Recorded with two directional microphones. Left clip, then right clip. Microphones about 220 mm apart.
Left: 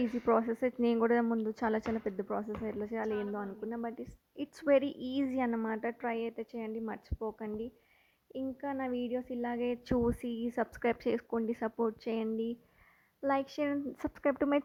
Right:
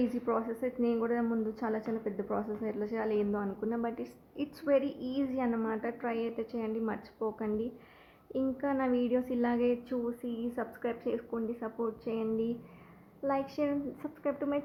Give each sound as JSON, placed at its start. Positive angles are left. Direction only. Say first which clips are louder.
{"t": 0.0, "sound": "a woman's voice", "louder": "left 2 dB", "side_deg": 40}
{"t": 9.9, "sound": "a woman's voice", "louder": "left 3 dB", "side_deg": 45}